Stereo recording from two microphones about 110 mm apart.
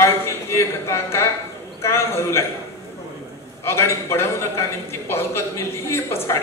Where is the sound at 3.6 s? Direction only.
25° left (ahead or behind).